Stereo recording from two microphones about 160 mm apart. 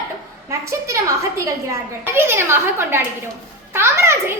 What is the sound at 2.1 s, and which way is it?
A woman's voice, 15° right (ahead or behind).